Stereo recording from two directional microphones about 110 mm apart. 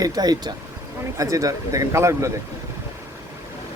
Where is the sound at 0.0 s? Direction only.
35° right (ahead or behind).